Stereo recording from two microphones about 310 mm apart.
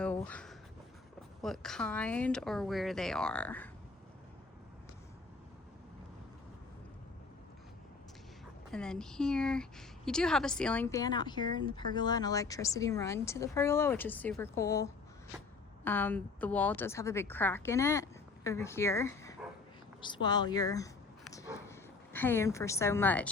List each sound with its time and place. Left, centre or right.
0.0 s a sound: centre
1.4 s speech: centre
8.7 s a woman's voice: centre